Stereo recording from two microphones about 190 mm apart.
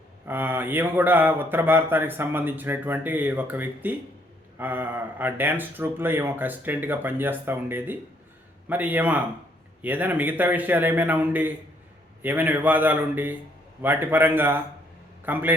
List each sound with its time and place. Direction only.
0.3 s a man's voice: 10° right (ahead or behind)